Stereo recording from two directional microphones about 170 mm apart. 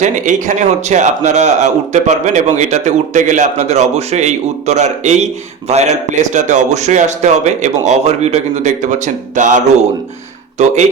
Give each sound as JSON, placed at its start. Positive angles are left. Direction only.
{"t": 0.0, "sound": "a man's voice", "side_deg": -45}